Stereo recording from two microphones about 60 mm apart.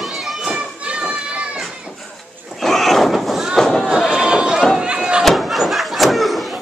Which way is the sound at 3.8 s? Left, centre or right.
Centre.